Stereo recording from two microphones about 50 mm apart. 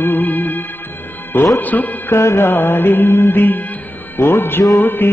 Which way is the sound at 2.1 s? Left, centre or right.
Left.